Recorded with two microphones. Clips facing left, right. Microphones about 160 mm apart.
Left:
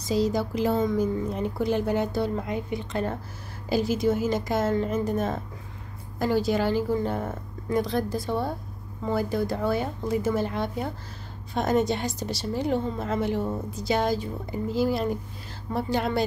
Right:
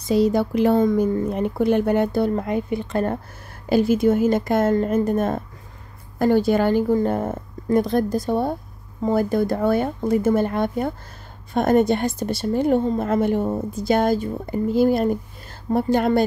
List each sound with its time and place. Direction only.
0.0 s a woman's voice: 60° right (ahead or behind)